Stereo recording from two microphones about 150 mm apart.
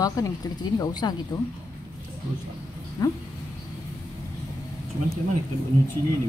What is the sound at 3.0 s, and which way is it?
Speech, 25° left (ahead or behind).